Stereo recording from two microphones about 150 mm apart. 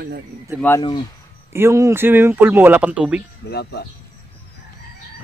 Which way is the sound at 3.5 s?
90° left.